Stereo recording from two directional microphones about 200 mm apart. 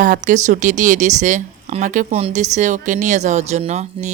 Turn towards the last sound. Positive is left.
turn(degrees=-35)  # may be behind; listen again after turning